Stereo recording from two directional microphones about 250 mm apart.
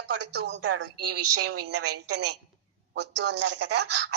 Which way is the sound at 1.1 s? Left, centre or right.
Right.